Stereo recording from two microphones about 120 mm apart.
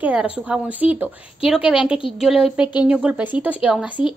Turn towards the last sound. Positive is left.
turn(degrees=-10)  # may be behind; listen again after turning